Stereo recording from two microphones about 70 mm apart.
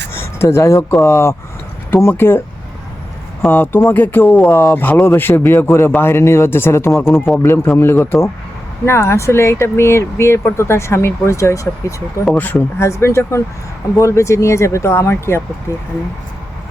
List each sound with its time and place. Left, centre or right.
0.1 s a sound: left
0.4 s speech: left
3.4 s speech: left
12.4 s speech: left
12.8 s speech: left